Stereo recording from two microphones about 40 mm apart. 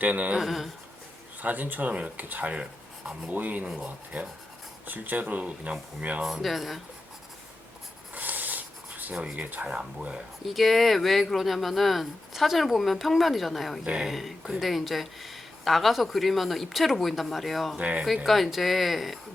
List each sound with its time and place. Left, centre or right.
0.0 s speech: right
0.3 s speech: centre
1.4 s speech: right
3.8 s speech: right
4.9 s speech: right
6.4 s speech: centre
8.1 s a sound: right
9.2 s speech: right
10.4 s speech: centre
13.8 s speech: right
14.1 s speech: centre
17.7 s speech: right
18.3 s speech: centre